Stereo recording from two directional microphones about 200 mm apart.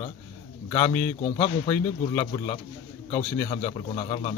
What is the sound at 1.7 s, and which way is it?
Speech, 20° left (ahead or behind).